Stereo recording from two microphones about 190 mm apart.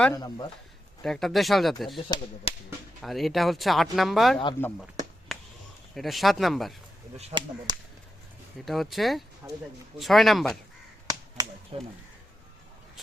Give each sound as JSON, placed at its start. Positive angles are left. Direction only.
{"t": 0.1, "sound": "speech", "side_deg": 20}
{"t": 1.0, "sound": "speech", "side_deg": 0}
{"t": 2.0, "sound": "speech", "side_deg": 25}
{"t": 3.0, "sound": "speech", "side_deg": 0}
{"t": 4.6, "sound": "speech", "side_deg": 10}
{"t": 5.3, "sound": "a sound", "side_deg": 0}
{"t": 5.9, "sound": "speech", "side_deg": 0}
{"t": 7.2, "sound": "speech", "side_deg": -35}
{"t": 8.6, "sound": "speech", "side_deg": 0}
{"t": 9.4, "sound": "speech", "side_deg": -10}
{"t": 10.0, "sound": "speech", "side_deg": 0}
{"t": 11.0, "sound": "crow", "side_deg": -20}
{"t": 11.7, "sound": "speech", "side_deg": -30}